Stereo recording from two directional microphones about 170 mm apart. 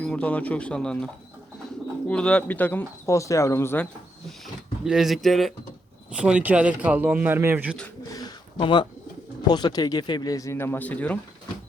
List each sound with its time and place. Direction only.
0.0 s speech: 10° left (ahead or behind)
4.9 s speech: centre (ahead or behind)
8.1 s bird: 25° left (ahead or behind)
9.5 s speech: 25° left (ahead or behind); by 11.2 s 10° left (ahead or behind)